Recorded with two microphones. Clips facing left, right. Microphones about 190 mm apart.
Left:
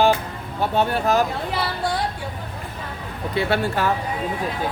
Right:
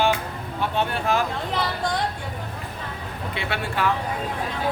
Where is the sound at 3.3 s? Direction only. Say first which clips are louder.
Left 7 dB; 40° left (ahead or behind).